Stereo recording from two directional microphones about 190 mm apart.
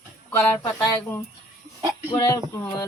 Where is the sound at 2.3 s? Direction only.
15° left (ahead or behind).